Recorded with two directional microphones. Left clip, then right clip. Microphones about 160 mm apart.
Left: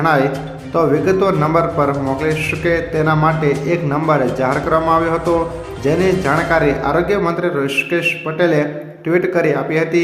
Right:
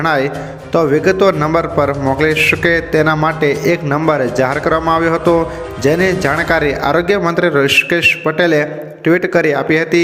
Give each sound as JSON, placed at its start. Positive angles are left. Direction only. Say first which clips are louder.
{"t": 0.0, "sound": "a man's voice", "louder": "even", "side_deg": -30}